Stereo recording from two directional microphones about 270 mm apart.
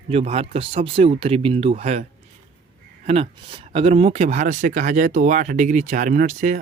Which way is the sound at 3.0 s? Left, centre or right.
Right.